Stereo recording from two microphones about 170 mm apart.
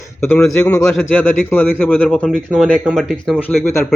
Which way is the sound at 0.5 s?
5° left (ahead or behind).